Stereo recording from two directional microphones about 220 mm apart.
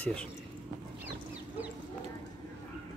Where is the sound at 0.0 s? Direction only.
5° left (ahead or behind).